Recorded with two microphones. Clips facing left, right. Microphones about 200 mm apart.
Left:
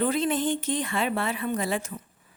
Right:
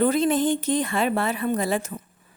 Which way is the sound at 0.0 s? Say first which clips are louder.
Right 5 dB; 40° right (ahead or behind).